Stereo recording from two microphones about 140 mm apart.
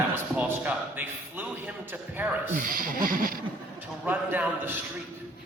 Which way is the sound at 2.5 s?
85° right.